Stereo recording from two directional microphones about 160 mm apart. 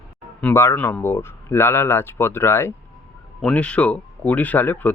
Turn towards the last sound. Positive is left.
turn(degrees=10)  # may be behind; listen again after turning